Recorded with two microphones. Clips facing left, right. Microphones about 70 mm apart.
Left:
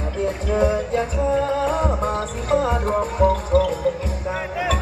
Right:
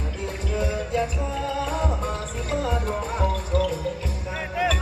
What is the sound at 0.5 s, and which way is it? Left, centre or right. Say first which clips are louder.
Music: left 6 dB; left.